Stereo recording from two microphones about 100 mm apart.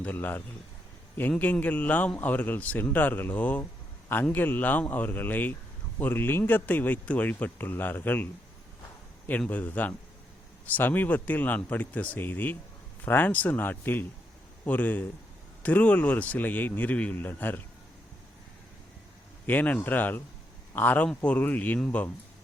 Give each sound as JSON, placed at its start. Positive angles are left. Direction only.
{"t": 0.0, "sound": "a man's voice", "side_deg": 20}
{"t": 9.4, "sound": "a man's voice", "side_deg": 15}
{"t": 19.5, "sound": "speech", "side_deg": 15}